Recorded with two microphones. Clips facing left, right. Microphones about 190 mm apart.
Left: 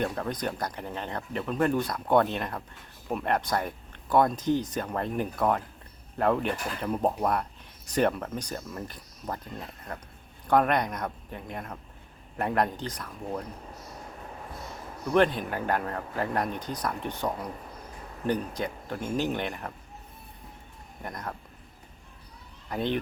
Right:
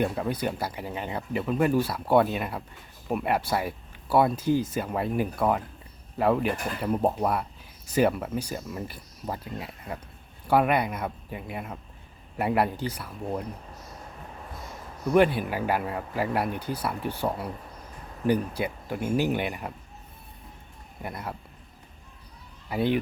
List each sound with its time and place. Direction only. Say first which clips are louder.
0.0 s speech: right 3 dB; 10° right (ahead or behind)
15.1 s speech: right 2 dB; 10° right (ahead or behind)
21.0 s speech: right 2 dB; 10° right (ahead or behind)
22.7 s speech: right 4 dB; 10° right (ahead or behind)